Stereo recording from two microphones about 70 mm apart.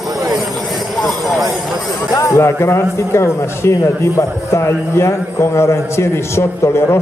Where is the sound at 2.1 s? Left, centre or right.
Left.